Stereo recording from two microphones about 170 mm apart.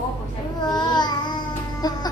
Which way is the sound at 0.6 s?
25° left (ahead or behind).